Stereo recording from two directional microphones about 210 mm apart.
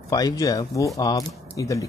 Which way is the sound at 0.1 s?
15° left (ahead or behind).